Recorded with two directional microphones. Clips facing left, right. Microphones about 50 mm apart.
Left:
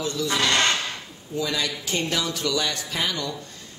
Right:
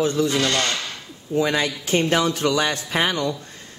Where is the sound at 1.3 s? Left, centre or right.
Right.